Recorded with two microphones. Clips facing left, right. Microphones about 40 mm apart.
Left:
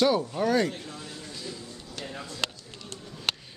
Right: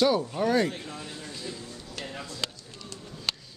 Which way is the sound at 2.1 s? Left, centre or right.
Centre.